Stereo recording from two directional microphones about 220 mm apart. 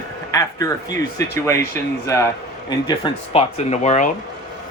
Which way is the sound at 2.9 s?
25° left (ahead or behind).